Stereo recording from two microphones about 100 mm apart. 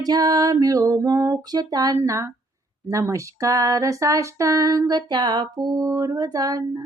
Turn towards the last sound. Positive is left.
turn(degrees=-40)  # may be behind; listen again after turning